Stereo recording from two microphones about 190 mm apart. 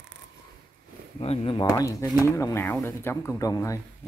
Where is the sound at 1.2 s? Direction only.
30° left (ahead or behind).